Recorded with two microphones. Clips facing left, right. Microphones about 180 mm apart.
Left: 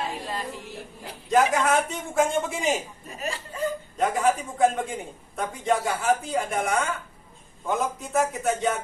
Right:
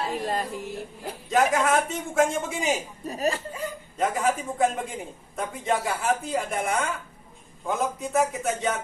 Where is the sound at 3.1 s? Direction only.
40° right (ahead or behind).